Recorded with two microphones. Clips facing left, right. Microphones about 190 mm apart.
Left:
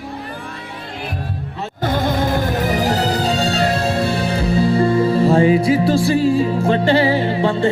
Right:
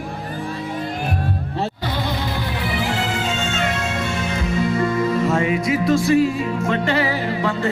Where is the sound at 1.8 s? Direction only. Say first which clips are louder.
Left 6 dB; 50° left (ahead or behind).